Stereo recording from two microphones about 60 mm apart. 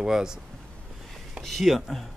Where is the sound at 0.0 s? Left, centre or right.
Centre.